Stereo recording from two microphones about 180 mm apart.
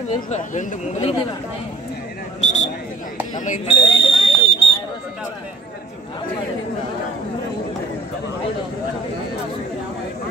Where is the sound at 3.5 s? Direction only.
35° left (ahead or behind).